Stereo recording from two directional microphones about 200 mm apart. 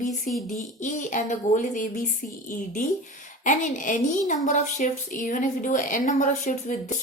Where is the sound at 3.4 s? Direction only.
40° left (ahead or behind).